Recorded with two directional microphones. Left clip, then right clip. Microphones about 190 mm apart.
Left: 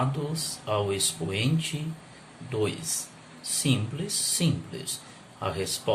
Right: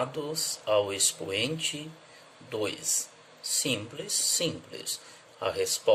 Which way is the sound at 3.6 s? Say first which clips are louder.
Left 1 dB; 40° right (ahead or behind).